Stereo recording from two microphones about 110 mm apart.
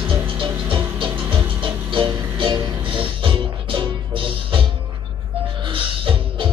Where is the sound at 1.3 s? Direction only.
50° right (ahead or behind).